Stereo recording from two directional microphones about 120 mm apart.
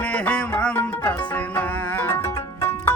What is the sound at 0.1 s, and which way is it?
Music, 10° left (ahead or behind).